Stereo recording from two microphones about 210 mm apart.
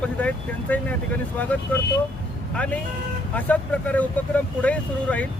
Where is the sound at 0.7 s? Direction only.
10° left (ahead or behind).